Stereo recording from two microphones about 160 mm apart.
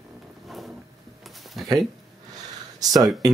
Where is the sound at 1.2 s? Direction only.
Centre (ahead or behind).